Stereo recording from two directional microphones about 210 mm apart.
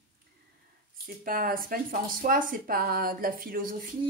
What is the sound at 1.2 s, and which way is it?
Speech, 45° right (ahead or behind).